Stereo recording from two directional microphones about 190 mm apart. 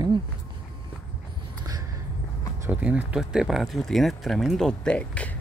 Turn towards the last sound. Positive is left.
turn(degrees=5)  # may be behind; listen again after turning